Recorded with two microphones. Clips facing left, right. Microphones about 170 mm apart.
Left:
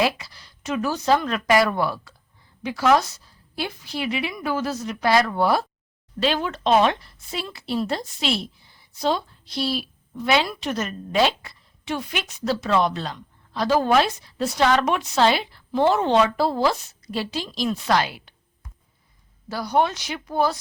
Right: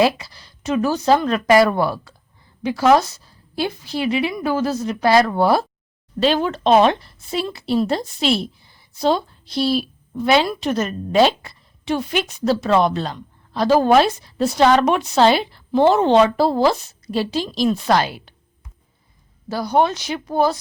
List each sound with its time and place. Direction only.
0.0 s a woman's voice: 30° right (ahead or behind)
19.5 s speech: 25° right (ahead or behind)